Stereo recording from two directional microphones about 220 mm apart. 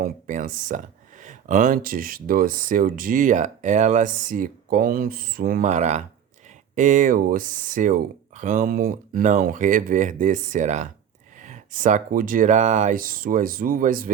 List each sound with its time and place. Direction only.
0.0 s speech: 35° right (ahead or behind)